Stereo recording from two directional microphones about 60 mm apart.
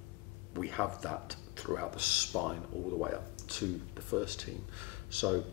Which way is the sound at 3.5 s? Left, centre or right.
Right.